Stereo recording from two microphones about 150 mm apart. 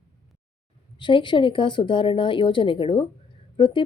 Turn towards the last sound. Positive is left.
turn(degrees=35)  # may be behind; listen again after turning